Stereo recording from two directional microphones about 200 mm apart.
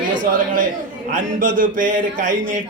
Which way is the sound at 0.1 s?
40° right (ahead or behind).